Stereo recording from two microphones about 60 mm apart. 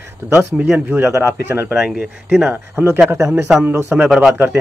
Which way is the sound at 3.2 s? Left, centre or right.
Centre.